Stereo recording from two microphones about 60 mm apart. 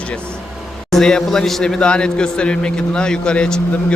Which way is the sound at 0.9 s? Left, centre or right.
Centre.